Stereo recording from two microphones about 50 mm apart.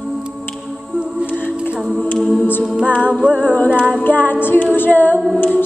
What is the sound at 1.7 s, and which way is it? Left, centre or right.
A capella, centre.